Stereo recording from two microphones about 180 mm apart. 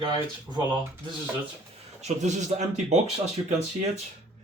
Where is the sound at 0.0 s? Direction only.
25° right (ahead or behind).